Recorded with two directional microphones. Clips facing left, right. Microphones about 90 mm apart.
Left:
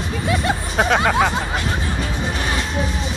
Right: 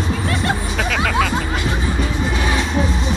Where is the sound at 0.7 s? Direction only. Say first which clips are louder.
Left 4 dB; 30° left (ahead or behind).